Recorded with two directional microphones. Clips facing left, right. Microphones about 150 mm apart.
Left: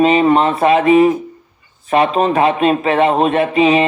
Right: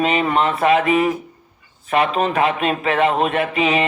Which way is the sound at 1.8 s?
30° left (ahead or behind).